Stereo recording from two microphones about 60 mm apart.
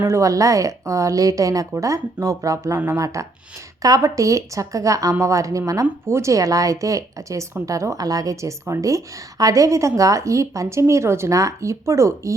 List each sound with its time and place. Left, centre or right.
0.1 s a woman's voice: right
6.1 s a woman's voice: right
9.4 s speech: right
11.3 s speech: right